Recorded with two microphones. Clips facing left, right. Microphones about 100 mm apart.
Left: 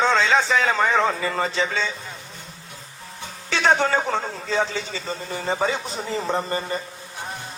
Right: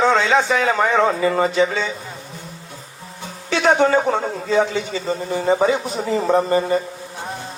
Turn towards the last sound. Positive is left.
turn(degrees=-30)  # may be behind; listen again after turning